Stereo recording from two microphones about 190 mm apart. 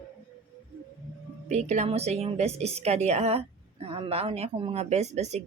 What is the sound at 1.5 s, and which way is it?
A woman's voice, 35° right (ahead or behind).